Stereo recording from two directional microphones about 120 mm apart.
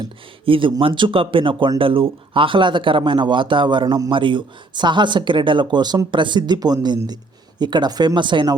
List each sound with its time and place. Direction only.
0.0 s speech: 45° right (ahead or behind)
4.1 s speech: 40° right (ahead or behind)